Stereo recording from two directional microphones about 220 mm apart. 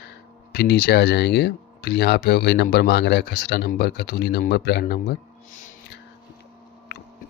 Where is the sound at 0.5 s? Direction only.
50° left (ahead or behind).